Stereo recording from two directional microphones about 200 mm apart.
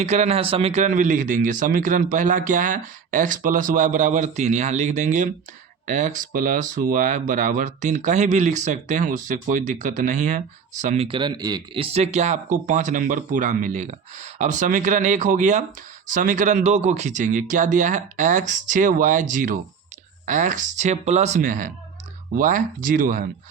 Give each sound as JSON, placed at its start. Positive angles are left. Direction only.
{"t": 0.0, "sound": "speech", "side_deg": -35}